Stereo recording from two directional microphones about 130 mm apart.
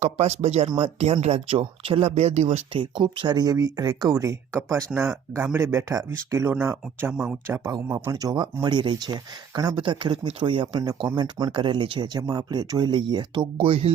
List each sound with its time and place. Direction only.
0.0 s speech: 55° right (ahead or behind)
2.7 s speech: 35° right (ahead or behind)